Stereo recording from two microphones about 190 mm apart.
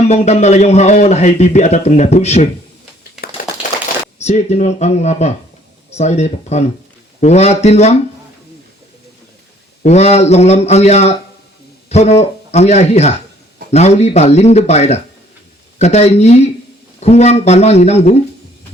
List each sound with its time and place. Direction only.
0.1 s speech: 35° left (ahead or behind)
4.2 s speech: 35° left (ahead or behind)
9.8 s speech: 35° left (ahead or behind)